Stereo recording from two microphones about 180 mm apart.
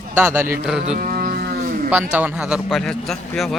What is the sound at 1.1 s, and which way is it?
Livestock, 50° right (ahead or behind).